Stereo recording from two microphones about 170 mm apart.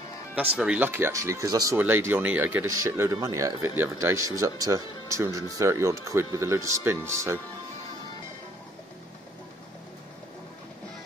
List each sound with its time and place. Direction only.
0.3 s speech: 5° right (ahead or behind)